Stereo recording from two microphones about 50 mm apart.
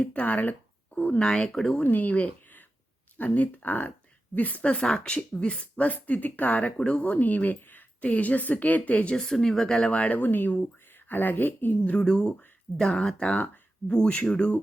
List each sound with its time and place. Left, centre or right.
0.0 s a woman's voice: left
1.2 s speech: centre
1.8 s a woman's voice: left
9.1 s speech: centre
9.9 s a woman's voice: left
11.9 s speech: centre